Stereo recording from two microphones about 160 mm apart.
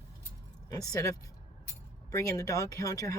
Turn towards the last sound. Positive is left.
turn(degrees=20)  # may be behind; listen again after turning